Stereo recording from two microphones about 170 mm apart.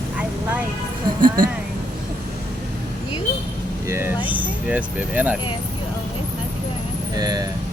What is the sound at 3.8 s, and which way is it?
Vehicle, 15° right (ahead or behind).